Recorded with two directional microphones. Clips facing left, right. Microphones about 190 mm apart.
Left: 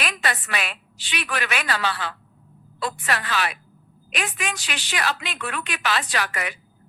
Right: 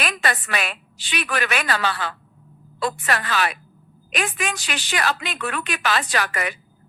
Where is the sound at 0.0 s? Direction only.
45° right (ahead or behind).